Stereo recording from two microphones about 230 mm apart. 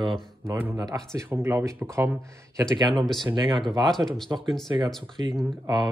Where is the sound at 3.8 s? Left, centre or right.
Centre.